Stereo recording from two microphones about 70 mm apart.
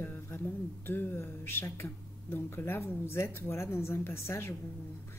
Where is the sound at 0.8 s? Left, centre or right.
Left.